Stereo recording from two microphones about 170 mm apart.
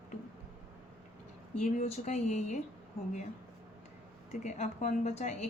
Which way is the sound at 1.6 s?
40° left (ahead or behind).